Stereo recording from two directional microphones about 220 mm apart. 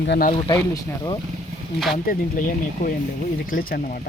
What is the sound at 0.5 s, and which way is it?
Speech, 15° left (ahead or behind).